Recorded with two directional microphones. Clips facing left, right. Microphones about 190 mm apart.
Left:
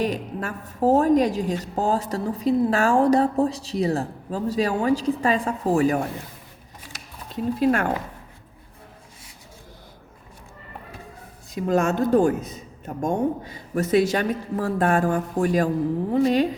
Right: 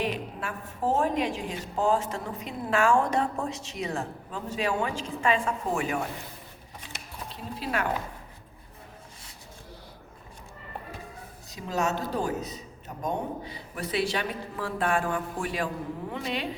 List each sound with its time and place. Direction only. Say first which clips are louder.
0.0 s a woman's voice: left 5 dB; 40° left (ahead or behind)
7.6 s a woman's voice: left 8 dB; 45° left (ahead or behind)
11.5 s a woman's voice: left 8 dB; 50° left (ahead or behind)